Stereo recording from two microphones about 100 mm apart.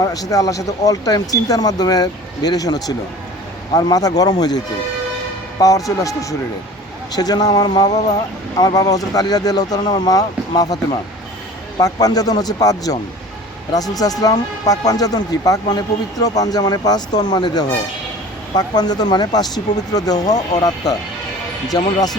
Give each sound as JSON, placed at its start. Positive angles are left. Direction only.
{"t": 0.0, "sound": "speech", "side_deg": 40}
{"t": 11.8, "sound": "speech", "side_deg": 40}